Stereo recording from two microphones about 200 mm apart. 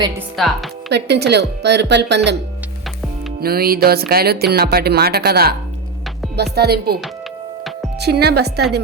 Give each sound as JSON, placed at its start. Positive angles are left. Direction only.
{"t": 0.3, "sound": "speech", "side_deg": 0}
{"t": 0.9, "sound": "a woman's voice", "side_deg": -55}
{"t": 3.4, "sound": "speech", "side_deg": -50}